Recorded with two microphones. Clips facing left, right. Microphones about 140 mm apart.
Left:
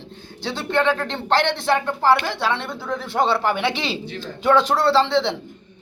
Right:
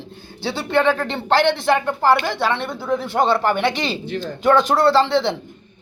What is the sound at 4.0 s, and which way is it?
Speech, 55° right (ahead or behind).